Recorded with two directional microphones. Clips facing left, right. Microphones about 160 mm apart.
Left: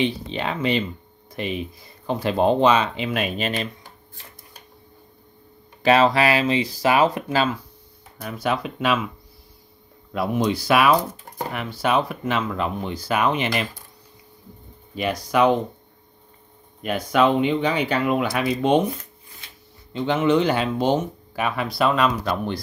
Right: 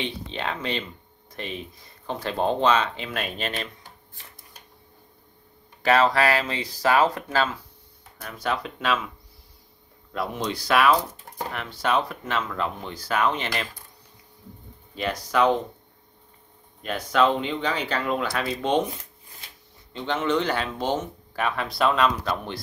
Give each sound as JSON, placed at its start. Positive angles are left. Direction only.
{"t": 0.0, "sound": "speech", "side_deg": 5}
{"t": 5.8, "sound": "speech", "side_deg": 20}
{"t": 10.1, "sound": "speech", "side_deg": 10}
{"t": 15.0, "sound": "speech", "side_deg": 15}
{"t": 16.8, "sound": "speech", "side_deg": 10}
{"t": 19.9, "sound": "speech", "side_deg": 10}